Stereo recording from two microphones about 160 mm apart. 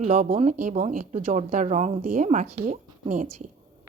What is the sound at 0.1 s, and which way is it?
A woman's voice, 50° right (ahead or behind).